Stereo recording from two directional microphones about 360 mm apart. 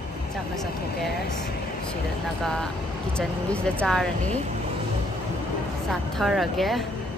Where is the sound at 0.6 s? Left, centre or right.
Centre.